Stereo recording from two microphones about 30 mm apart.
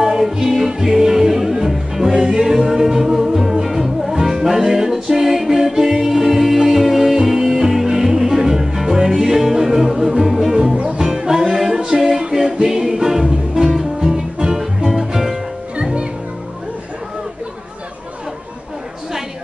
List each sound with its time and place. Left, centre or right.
0.0 s music: centre
7.2 s music: centre
12.2 s a capella: right
12.6 s music: centre
15.7 s music: right